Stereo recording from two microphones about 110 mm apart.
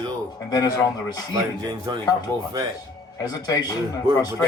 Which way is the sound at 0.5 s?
35° left (ahead or behind).